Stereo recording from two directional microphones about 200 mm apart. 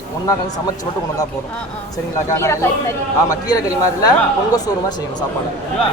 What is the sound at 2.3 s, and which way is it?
A woman's voice, 15° left (ahead or behind).